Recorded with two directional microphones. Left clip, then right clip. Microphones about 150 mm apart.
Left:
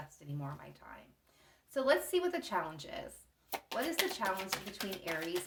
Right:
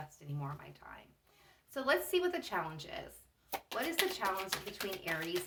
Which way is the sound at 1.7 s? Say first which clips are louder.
Left 2 dB; 35° left (ahead or behind).